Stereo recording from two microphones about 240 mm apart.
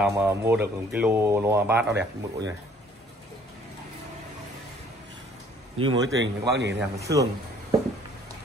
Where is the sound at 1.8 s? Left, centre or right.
Right.